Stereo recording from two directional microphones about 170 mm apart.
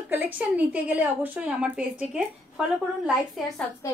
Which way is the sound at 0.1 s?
10° right (ahead or behind).